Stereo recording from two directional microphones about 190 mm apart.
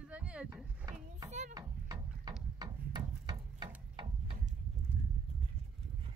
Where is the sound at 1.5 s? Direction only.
20° right (ahead or behind).